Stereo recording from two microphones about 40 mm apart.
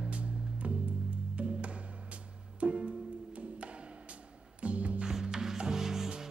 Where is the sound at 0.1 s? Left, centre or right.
Right.